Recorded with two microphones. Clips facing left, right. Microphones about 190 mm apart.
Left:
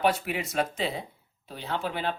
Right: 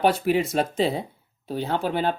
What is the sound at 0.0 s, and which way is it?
Speech, 35° right (ahead or behind).